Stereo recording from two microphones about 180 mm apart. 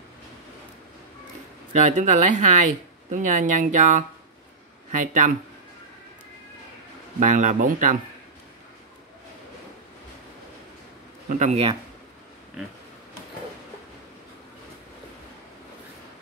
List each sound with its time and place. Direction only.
1.7 s speech: 40° right (ahead or behind)
7.2 s speech: 45° right (ahead or behind)
11.2 s speech: 45° right (ahead or behind)